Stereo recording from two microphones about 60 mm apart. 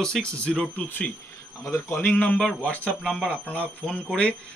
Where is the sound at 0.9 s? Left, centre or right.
Left.